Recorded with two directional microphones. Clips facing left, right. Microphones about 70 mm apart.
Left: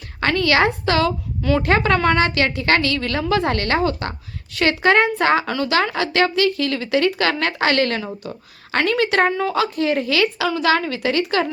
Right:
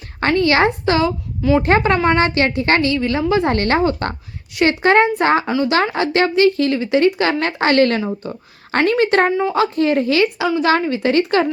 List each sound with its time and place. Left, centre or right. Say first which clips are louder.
0.2 s a woman's voice: right 3 dB; right
1.4 s speech: right 5 dB; centre
1.6 s a woman's voice: right 2 dB; right
5.5 s speech: right 5 dB; centre
5.7 s a woman's voice: right 1 dB; right
8.0 s a woman's voice: right 5 dB; right